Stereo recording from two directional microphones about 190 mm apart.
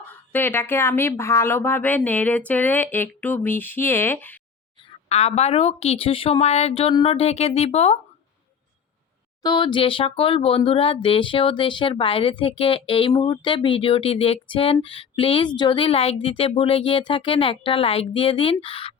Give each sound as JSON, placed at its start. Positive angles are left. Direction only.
{"t": 0.1, "sound": "speech", "side_deg": 10}
{"t": 4.9, "sound": "speech", "side_deg": 35}
{"t": 9.4, "sound": "speech", "side_deg": 20}